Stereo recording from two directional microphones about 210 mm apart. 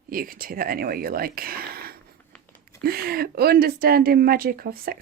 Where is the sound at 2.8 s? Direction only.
45° right (ahead or behind).